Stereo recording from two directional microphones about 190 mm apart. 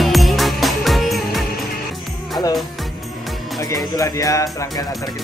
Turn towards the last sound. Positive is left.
turn(degrees=15)  # may be behind; listen again after turning